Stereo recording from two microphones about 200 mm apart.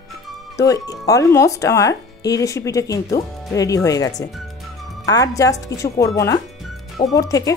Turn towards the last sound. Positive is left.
turn(degrees=15)  # may be behind; listen again after turning